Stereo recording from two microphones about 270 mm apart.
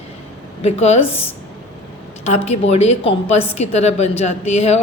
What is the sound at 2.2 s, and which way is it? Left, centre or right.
A woman's voice, left.